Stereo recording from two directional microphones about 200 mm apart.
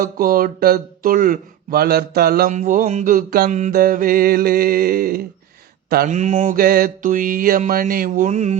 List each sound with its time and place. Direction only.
0.0 s speech: 45° right (ahead or behind)
6.1 s speech: 35° right (ahead or behind)